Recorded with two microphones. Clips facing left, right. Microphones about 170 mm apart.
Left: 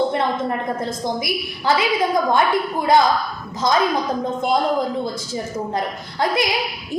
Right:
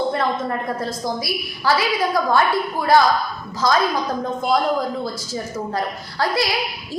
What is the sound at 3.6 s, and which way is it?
Speech, 20° left (ahead or behind).